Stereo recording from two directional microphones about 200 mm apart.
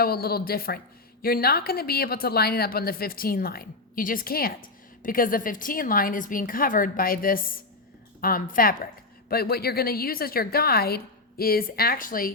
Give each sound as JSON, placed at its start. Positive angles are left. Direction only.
{"t": 0.0, "sound": "a woman's voice", "side_deg": 50}